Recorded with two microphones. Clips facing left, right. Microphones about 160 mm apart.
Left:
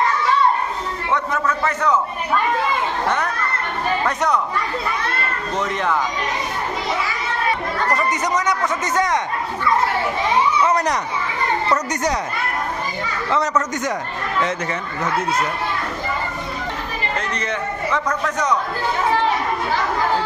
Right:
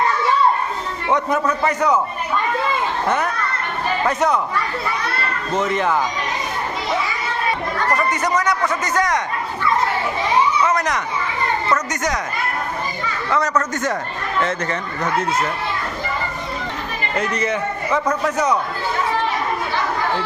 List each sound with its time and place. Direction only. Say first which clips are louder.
1.1 s a man's voice: right 3 dB; 15° right (ahead or behind)
5.6 s speech: right 2 dB; centre (ahead or behind)
8.1 s a man's voice: right 1 dB; 20° left (ahead or behind)
10.7 s speech: left 1 dB; 35° left (ahead or behind)
13.3 s a man's voice: even; 20° left (ahead or behind)
17.2 s a man's voice: right 8 dB; 10° right (ahead or behind)